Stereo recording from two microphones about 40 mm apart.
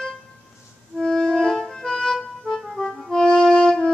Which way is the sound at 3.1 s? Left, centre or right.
Left.